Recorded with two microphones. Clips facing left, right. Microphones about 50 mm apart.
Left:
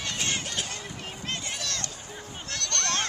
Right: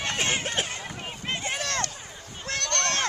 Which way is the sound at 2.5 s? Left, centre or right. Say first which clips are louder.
Right 4 dB; right.